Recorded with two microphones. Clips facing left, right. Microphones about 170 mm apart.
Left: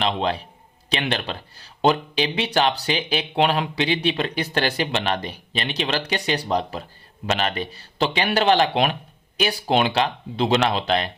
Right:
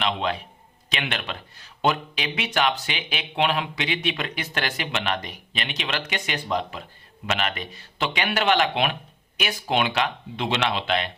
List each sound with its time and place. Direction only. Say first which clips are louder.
0.0 s speech: left 3 dB; 35° left (ahead or behind)